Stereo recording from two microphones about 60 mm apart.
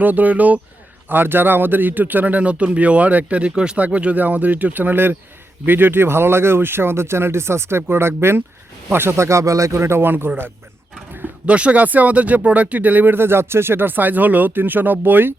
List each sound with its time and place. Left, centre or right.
0.0 s speech: right
1.1 s speech: right
11.4 s speech: right